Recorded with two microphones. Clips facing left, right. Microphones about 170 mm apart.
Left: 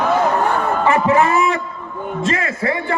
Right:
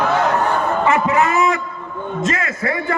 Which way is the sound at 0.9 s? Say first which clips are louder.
Left 3 dB; 30° left (ahead or behind).